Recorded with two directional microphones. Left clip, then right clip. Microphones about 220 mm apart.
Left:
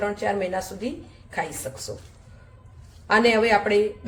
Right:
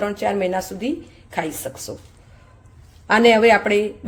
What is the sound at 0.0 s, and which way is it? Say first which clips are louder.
Speech: right 4 dB; 45° right (ahead or behind).